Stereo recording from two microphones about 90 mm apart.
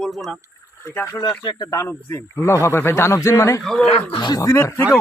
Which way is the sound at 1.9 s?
25° left (ahead or behind).